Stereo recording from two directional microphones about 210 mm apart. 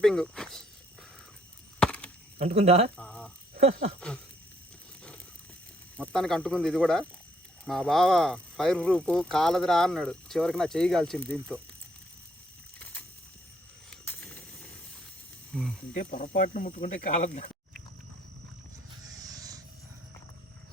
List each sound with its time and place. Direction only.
0.0 s speech: centre (ahead or behind)
1.8 s chop: 5° left (ahead or behind)
2.4 s speech: 30° right (ahead or behind)
3.0 s a sound: 5° left (ahead or behind)
3.6 s speech: 30° right (ahead or behind)
6.0 s speech: centre (ahead or behind)
12.8 s a sound: 10° left (ahead or behind)
15.5 s speech: centre (ahead or behind)
16.0 s speech: 35° left (ahead or behind)
19.2 s a sound: 15° right (ahead or behind)